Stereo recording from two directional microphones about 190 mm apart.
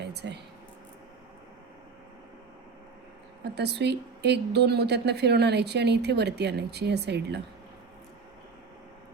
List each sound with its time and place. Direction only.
0.0 s speech: 60° right (ahead or behind)
3.4 s speech: 60° right (ahead or behind)